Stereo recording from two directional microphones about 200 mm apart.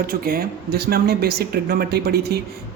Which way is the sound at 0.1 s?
50° right (ahead or behind).